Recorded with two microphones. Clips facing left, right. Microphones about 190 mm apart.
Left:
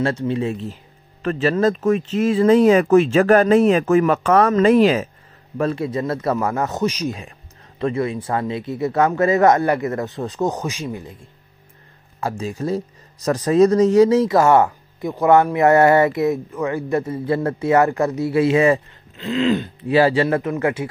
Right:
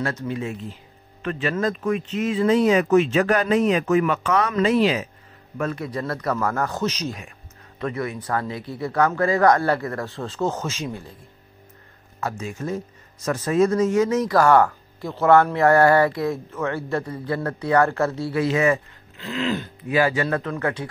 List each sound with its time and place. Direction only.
0.0 s speech: 25° left (ahead or behind)
1.2 s speech: 40° left (ahead or behind)
5.6 s speech: 30° left (ahead or behind)
6.9 s throat clearing: 10° left (ahead or behind)
7.8 s speech: 25° left (ahead or behind)
12.2 s speech: 30° left (ahead or behind)
19.2 s throat clearing: 20° left (ahead or behind)
19.9 s speech: 35° left (ahead or behind)